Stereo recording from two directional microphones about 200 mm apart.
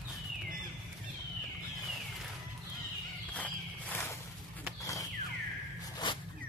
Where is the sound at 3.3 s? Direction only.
10° left (ahead or behind).